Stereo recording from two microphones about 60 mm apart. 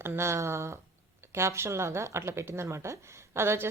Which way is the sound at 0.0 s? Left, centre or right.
Right.